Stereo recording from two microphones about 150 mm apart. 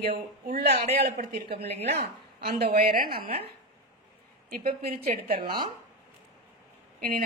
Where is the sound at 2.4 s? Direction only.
80° right.